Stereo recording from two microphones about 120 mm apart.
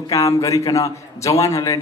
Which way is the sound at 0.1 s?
30° left (ahead or behind).